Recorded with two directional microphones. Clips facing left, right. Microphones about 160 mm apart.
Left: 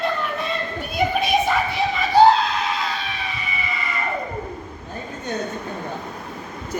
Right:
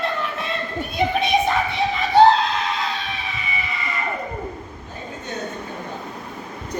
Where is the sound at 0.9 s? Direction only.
Centre (ahead or behind).